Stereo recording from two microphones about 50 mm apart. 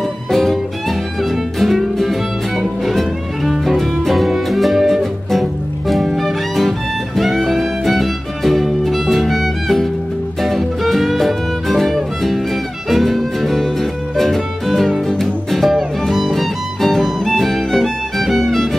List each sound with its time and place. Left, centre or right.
0.3 s music: centre